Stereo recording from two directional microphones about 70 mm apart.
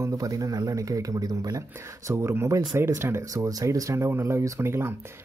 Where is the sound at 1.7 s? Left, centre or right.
Right.